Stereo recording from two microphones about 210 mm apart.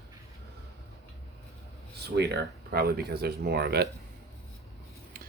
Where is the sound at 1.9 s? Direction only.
50° right (ahead or behind).